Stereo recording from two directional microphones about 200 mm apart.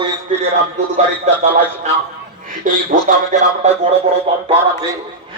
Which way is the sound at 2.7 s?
40° right (ahead or behind).